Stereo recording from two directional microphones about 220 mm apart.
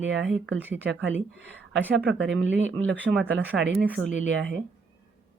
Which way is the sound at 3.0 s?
Centre (ahead or behind).